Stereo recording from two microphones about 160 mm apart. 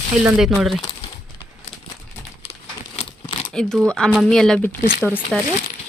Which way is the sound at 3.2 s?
30° left (ahead or behind).